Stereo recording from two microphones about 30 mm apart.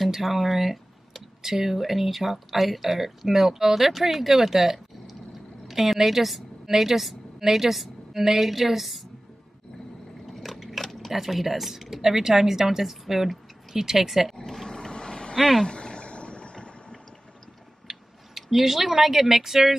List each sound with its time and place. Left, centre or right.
0.2 s a woman's voice: centre
10.4 s a sound: centre
11.1 s speech: centre
12.0 s speech: centre
14.3 s a sound: centre
14.7 s vehicle: left
15.3 s speech: centre
15.6 s a sound: left
17.8 s speech: centre